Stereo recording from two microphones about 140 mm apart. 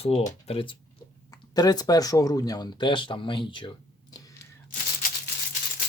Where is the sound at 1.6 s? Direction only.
30° left (ahead or behind).